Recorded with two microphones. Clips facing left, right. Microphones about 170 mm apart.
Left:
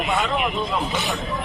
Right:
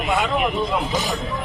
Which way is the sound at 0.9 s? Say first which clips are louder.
Right 2 dB; 40° right (ahead or behind).